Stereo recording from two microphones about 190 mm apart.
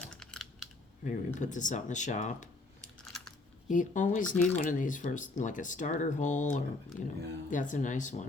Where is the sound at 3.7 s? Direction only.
45° left (ahead or behind).